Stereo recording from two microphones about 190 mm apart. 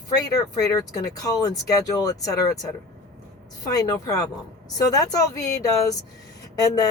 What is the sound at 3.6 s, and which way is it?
Speech, 20° left (ahead or behind).